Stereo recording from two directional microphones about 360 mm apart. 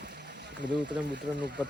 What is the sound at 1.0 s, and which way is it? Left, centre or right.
Speech, right.